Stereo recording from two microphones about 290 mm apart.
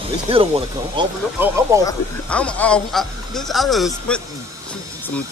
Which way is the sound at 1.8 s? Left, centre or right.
Centre.